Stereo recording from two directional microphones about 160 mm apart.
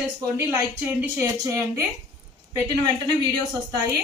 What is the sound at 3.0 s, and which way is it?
Speech, 25° right (ahead or behind).